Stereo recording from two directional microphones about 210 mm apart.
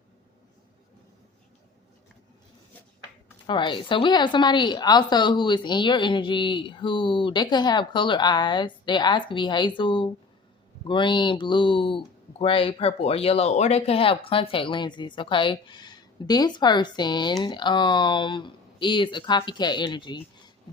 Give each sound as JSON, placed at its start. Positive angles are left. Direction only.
{"t": 3.4, "sound": "speech", "side_deg": 20}